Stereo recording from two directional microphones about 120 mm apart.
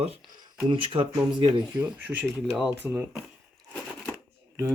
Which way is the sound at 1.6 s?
10° right (ahead or behind).